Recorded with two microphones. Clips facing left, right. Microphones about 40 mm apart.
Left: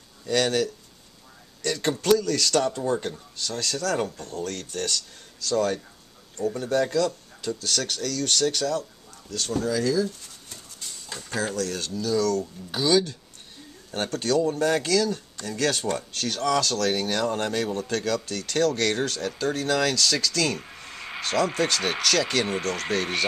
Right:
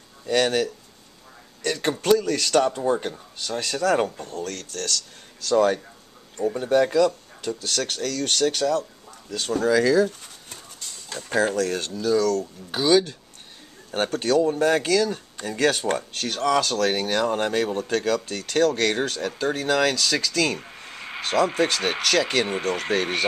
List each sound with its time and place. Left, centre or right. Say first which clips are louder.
0.3 s speech: right 2 dB; centre
4.2 s speech: right 1 dB; centre
4.6 s speech: even; centre
5.4 s speech: right 5 dB; right
6.4 s speech: right 4 dB; right
9.7 s speech: right 7 dB; right
10.8 s a sound: right 2 dB; centre
11.2 s speech: right 6 dB; centre
12.7 s speech: right 3 dB; centre